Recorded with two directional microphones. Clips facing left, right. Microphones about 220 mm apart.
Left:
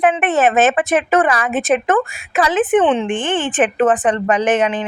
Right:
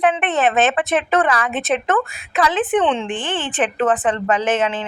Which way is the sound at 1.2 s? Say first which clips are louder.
Left 3 dB; 15° left (ahead or behind).